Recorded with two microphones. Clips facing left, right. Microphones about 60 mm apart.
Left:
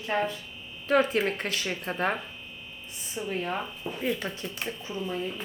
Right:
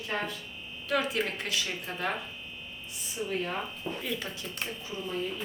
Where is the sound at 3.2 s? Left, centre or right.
Centre.